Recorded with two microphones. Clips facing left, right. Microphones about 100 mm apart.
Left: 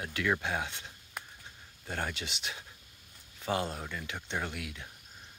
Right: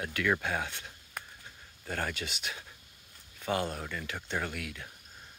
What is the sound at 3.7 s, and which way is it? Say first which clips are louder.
Speech: right 1 dB; 5° left (ahead or behind).